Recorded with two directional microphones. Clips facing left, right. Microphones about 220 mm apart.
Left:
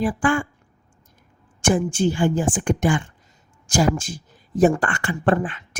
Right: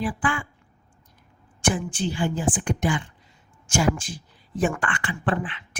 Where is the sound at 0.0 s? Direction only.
45° left (ahead or behind).